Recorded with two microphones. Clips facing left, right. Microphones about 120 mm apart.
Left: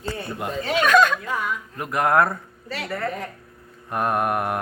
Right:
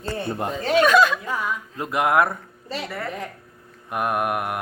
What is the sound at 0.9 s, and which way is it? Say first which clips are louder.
Speech: even; 5° right (ahead or behind).